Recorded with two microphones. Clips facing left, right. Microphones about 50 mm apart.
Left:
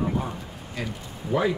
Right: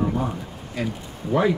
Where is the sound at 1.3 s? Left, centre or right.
Centre.